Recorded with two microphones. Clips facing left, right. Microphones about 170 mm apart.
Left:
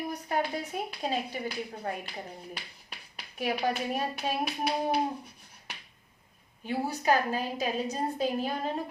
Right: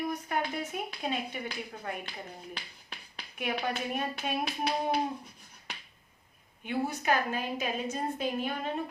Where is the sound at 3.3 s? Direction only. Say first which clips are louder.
Left 3 dB; 35° left (ahead or behind).